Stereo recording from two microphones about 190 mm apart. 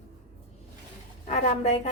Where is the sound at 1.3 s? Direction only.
35° left (ahead or behind).